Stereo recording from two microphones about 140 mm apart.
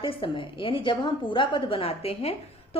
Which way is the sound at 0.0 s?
40° left (ahead or behind).